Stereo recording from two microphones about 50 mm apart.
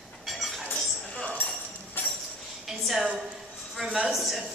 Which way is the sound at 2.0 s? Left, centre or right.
Left.